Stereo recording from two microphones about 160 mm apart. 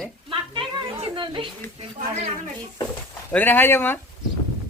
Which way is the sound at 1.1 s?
30° right (ahead or behind).